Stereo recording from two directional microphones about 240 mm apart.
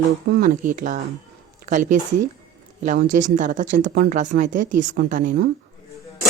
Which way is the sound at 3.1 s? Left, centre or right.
Right.